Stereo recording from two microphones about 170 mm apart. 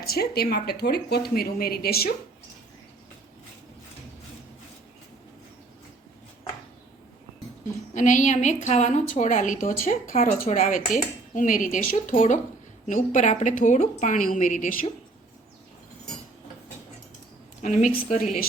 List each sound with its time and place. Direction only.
0.0 s speech: 65° left (ahead or behind)
7.9 s a woman's voice: 45° left (ahead or behind)
17.6 s a woman's voice: 45° left (ahead or behind)